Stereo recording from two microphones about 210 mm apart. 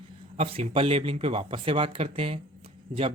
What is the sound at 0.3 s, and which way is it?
Speech, 30° right (ahead or behind).